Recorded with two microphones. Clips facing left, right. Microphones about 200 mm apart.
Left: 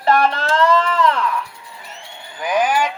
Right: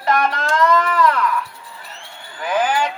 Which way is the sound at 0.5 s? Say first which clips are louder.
Right 1 dB; 30° left (ahead or behind).